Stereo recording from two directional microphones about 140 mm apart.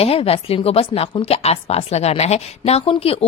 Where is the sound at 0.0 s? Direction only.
45° left (ahead or behind).